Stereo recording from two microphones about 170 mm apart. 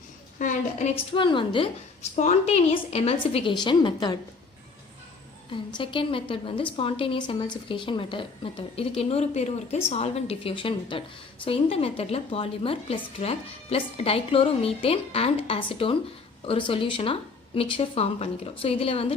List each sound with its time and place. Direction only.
0.3 s a woman's voice: 45° left (ahead or behind)
1.1 s a woman's voice: 30° left (ahead or behind)
2.1 s a woman's voice: 40° left (ahead or behind)
5.5 s a woman's voice: 30° left (ahead or behind)